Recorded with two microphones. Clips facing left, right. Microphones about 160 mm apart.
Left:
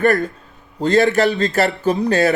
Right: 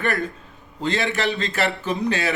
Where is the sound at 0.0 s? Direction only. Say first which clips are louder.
Left 8 dB; 40° left (ahead or behind).